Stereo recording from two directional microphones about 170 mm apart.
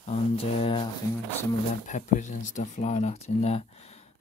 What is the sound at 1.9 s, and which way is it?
Speech, 45° left (ahead or behind).